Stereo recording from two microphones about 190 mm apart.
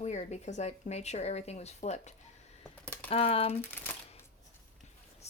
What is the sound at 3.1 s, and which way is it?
Speech, 30° left (ahead or behind).